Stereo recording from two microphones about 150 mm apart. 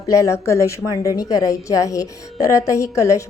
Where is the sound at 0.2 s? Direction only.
20° left (ahead or behind).